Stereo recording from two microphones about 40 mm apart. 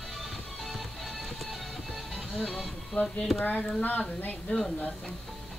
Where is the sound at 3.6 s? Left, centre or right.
Left.